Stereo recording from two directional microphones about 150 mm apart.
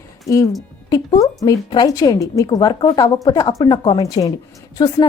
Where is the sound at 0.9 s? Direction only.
25° left (ahead or behind).